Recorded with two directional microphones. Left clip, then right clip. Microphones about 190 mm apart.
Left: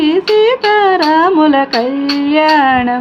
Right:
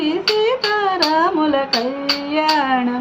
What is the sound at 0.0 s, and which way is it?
Music, 45° left (ahead or behind).